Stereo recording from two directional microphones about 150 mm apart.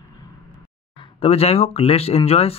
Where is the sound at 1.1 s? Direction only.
45° left (ahead or behind).